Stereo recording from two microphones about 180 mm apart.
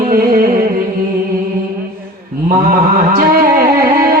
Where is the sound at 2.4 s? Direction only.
50° right (ahead or behind).